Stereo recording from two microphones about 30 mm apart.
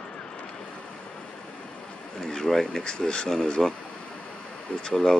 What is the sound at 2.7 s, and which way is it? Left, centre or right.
Speech, left.